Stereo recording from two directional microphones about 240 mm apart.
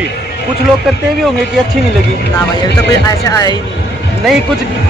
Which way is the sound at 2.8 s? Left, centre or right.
Centre.